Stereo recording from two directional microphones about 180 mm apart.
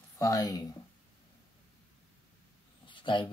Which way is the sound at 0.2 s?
20° left (ahead or behind).